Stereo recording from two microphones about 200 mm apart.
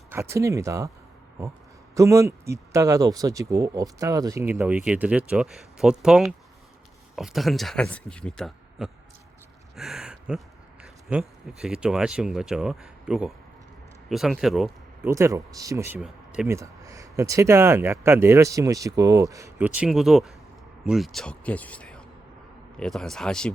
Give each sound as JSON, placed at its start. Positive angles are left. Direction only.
{"t": 0.1, "sound": "speech", "side_deg": -15}
{"t": 2.0, "sound": "speech", "side_deg": -15}
{"t": 9.7, "sound": "a sound", "side_deg": 0}
{"t": 11.1, "sound": "speech", "side_deg": 0}
{"t": 15.0, "sound": "speech", "side_deg": -15}
{"t": 16.0, "sound": "speech", "side_deg": -5}
{"t": 16.5, "sound": "speech", "side_deg": -15}